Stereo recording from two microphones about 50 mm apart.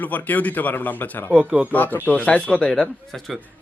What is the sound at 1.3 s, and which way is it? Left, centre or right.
Speech, right.